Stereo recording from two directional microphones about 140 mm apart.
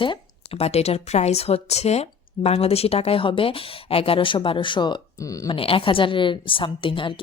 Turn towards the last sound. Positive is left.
turn(degrees=35)  # may be behind; listen again after turning